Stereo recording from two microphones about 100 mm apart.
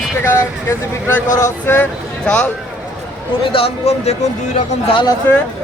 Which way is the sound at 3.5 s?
80° left.